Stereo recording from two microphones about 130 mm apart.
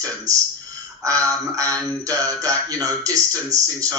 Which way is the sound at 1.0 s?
25° right (ahead or behind).